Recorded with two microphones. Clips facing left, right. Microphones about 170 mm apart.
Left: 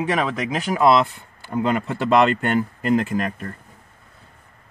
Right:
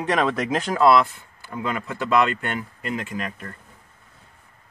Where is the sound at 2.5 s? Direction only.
45° left (ahead or behind).